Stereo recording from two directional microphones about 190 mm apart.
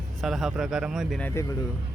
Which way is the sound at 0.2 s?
Centre (ahead or behind).